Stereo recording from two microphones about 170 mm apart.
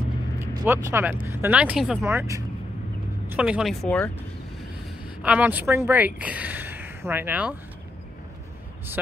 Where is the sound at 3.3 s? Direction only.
5° right (ahead or behind).